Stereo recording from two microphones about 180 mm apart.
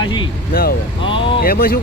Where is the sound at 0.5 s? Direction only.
50° left (ahead or behind).